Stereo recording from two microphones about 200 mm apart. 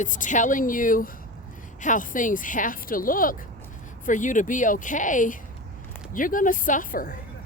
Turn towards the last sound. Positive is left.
turn(degrees=45)  # may be behind; listen again after turning